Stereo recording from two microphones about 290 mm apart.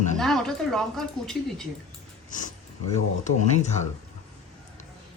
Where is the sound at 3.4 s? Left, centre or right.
Left.